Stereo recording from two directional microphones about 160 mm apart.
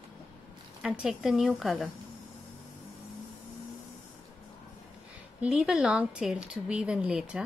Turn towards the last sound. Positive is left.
turn(degrees=-5)  # may be behind; listen again after turning